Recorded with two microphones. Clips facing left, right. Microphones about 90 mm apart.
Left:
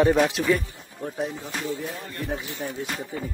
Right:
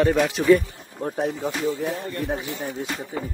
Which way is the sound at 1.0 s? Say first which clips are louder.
Right 5 dB; 35° right (ahead or behind).